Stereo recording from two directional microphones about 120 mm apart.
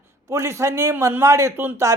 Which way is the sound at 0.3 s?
25° right (ahead or behind).